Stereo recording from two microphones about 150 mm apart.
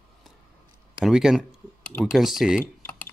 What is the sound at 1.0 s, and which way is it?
Speech, centre (ahead or behind).